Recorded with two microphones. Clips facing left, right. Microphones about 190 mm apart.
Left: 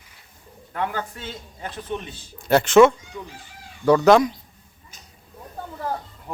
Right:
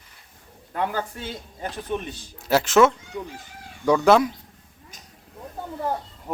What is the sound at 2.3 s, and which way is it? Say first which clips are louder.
Speech: left 4 dB; centre (ahead or behind).